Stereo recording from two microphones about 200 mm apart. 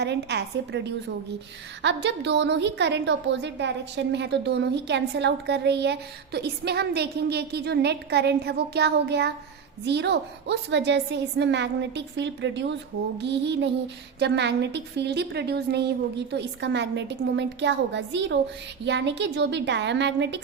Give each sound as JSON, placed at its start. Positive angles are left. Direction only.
{"t": 0.0, "sound": "a woman's voice", "side_deg": -60}